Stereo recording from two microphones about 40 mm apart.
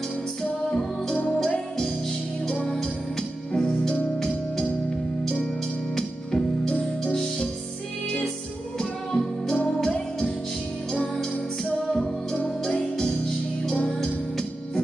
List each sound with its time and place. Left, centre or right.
0.7 s music: centre
5.9 s music: centre
8.7 s music: centre
11.6 s music: centre
13.8 s music: centre